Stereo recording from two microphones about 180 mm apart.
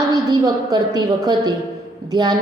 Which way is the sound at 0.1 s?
20° right (ahead or behind).